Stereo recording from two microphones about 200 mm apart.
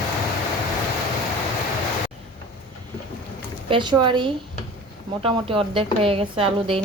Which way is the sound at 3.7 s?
20° right (ahead or behind).